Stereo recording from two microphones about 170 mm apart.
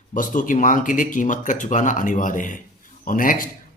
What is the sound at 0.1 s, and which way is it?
Speech, 50° left (ahead or behind).